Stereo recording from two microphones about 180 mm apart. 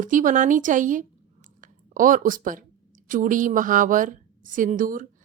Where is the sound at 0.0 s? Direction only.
45° right (ahead or behind).